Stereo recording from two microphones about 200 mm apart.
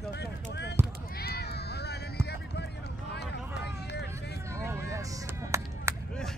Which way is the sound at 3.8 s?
55° left (ahead or behind).